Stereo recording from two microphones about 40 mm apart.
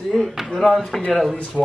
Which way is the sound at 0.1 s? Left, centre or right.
Centre.